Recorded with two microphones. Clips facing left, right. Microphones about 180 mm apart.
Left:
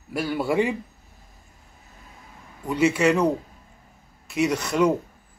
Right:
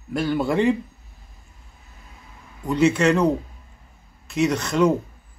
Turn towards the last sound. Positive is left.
turn(degrees=10)  # may be behind; listen again after turning